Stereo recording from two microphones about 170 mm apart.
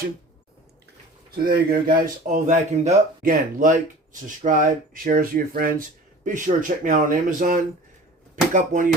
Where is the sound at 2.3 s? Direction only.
50° right (ahead or behind).